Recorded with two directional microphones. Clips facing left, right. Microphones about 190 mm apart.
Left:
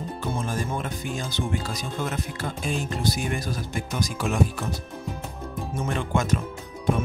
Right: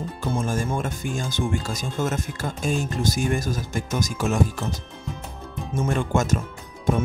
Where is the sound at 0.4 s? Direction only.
45° right (ahead or behind).